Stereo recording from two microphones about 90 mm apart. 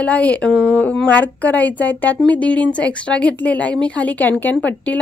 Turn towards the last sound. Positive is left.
turn(degrees=15)  # may be behind; listen again after turning